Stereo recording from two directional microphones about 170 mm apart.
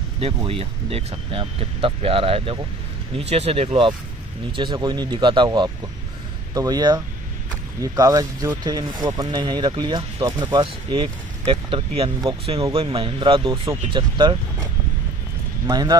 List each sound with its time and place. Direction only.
0.2 s speech: 35° right (ahead or behind)